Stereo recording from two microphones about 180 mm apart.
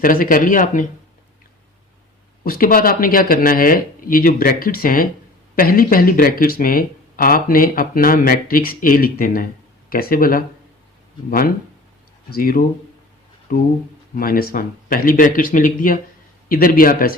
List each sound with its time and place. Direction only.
0.0 s speech: 50° left (ahead or behind)
2.4 s speech: 55° left (ahead or behind)